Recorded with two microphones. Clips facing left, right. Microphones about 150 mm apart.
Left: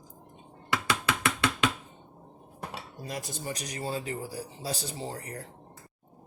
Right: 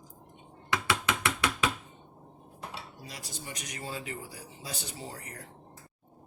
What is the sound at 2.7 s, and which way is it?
Cutlery, 55° left (ahead or behind).